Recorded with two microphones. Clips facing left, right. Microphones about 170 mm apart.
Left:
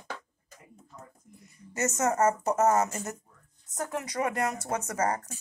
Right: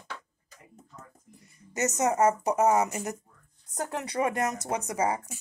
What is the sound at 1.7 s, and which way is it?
Speech, 15° right (ahead or behind).